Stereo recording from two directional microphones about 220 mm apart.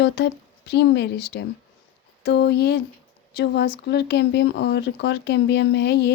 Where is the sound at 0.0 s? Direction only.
50° left (ahead or behind).